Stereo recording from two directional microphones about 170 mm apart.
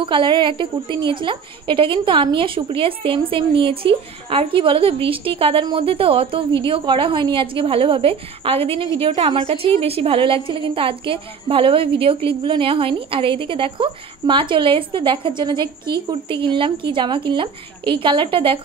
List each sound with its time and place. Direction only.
0.0 s a woman's voice: 30° right (ahead or behind)